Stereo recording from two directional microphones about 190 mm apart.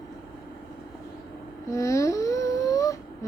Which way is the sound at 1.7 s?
15° left (ahead or behind).